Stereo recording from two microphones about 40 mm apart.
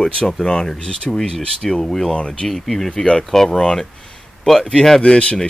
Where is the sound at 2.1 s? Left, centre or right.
Left.